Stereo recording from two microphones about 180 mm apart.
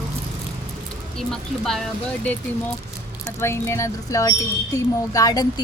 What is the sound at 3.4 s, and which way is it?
A woman's voice, 15° left (ahead or behind).